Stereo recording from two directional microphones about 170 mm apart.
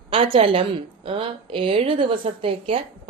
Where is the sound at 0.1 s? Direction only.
35° right (ahead or behind).